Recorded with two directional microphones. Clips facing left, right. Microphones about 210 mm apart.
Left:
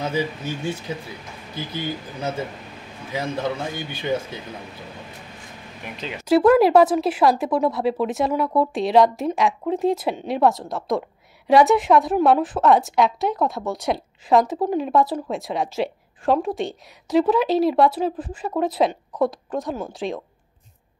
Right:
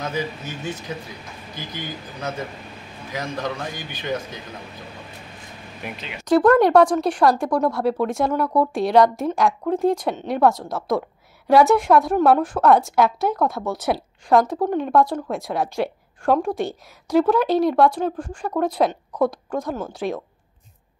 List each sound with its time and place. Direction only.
0.1 s a man's voice: 30° left (ahead or behind)
3.1 s a man's voice: 25° left (ahead or behind)
5.9 s speech: 5° right (ahead or behind)
6.2 s speech: 5° left (ahead or behind)